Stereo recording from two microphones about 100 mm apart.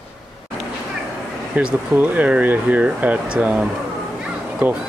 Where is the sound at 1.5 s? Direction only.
10° right (ahead or behind).